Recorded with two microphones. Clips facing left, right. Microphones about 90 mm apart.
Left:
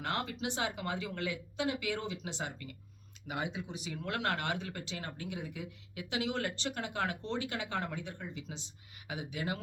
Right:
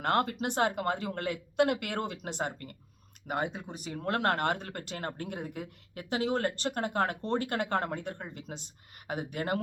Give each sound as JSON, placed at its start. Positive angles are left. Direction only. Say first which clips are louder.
{"t": 0.0, "sound": "speech", "louder": "right 7 dB", "side_deg": -50}